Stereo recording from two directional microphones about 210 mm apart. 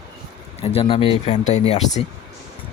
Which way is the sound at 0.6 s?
30° left (ahead or behind).